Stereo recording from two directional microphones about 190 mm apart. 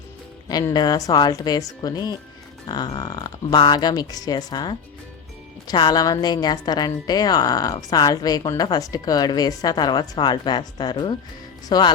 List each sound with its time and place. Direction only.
0.4 s a woman's voice: 20° left (ahead or behind)